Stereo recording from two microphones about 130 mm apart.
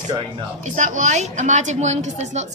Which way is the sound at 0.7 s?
70° right (ahead or behind).